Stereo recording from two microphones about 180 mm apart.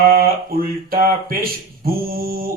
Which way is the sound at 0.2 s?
55° right (ahead or behind).